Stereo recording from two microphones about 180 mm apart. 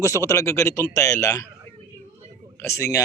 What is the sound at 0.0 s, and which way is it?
A man's voice, 15° left (ahead or behind).